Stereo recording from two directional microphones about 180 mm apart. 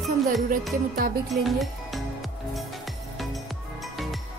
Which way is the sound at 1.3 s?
Centre (ahead or behind).